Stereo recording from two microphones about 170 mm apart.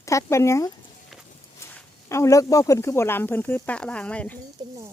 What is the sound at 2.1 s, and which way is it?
Speech, 15° left (ahead or behind).